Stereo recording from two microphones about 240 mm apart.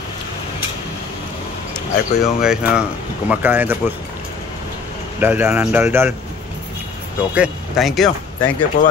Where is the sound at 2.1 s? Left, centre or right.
Centre.